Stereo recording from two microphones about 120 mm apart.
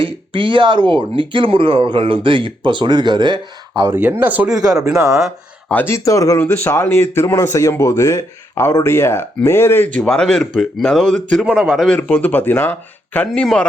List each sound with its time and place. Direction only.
0.0 s speech: 45° right (ahead or behind)
3.8 s speech: 20° right (ahead or behind)
4.6 s speech: 30° right (ahead or behind)
5.1 s speech: centre (ahead or behind)
5.7 s speech: 20° left (ahead or behind)
10.0 s speech: 5° left (ahead or behind)
11.4 s speech: 10° right (ahead or behind)
12.0 s speech: 10° left (ahead or behind)